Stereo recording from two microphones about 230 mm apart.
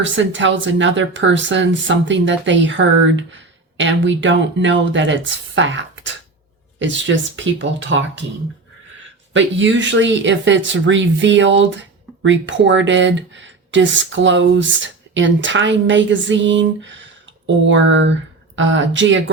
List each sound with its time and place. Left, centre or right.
0.0 s speech: right
9.3 s speech: right